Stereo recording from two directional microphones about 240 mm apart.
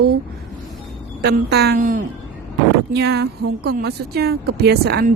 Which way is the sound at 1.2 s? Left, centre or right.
Right.